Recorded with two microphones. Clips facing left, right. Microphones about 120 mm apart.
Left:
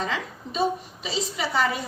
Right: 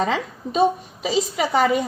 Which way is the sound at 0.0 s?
50° right (ahead or behind).